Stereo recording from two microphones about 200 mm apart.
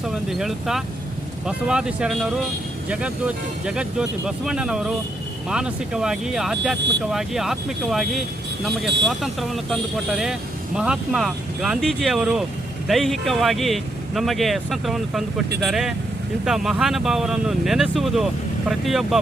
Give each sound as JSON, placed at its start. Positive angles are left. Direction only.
{"t": 0.1, "sound": "speech", "side_deg": 0}